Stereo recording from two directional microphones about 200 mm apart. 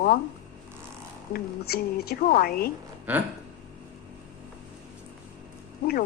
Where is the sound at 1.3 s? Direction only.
50° left (ahead or behind).